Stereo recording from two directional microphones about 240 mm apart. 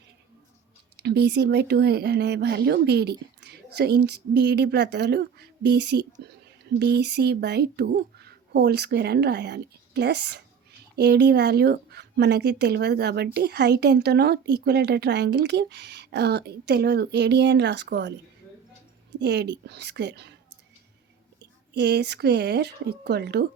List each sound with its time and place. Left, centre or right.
0.9 s speech: right
19.2 s speech: right
21.7 s speech: right